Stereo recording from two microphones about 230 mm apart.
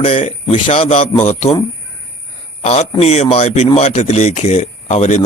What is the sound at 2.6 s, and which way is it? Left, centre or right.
Speech, left.